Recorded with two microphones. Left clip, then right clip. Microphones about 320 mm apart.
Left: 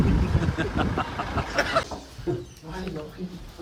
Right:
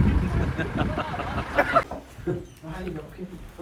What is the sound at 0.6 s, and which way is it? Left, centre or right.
Speech, centre.